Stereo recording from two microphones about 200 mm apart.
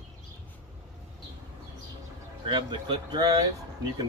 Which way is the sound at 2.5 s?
20° right (ahead or behind).